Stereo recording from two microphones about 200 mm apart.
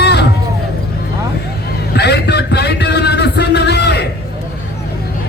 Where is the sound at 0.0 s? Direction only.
55° left (ahead or behind).